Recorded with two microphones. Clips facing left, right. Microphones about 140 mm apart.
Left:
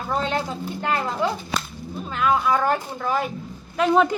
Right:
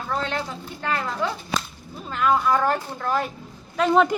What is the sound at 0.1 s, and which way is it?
Speech, 20° left (ahead or behind).